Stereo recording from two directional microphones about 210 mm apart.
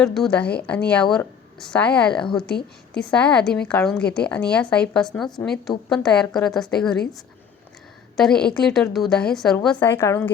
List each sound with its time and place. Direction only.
0.0 s a woman's voice: 5° left (ahead or behind)
8.1 s a woman's voice: 5° left (ahead or behind)